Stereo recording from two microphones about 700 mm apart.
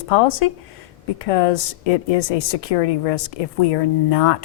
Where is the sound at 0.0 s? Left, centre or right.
Left.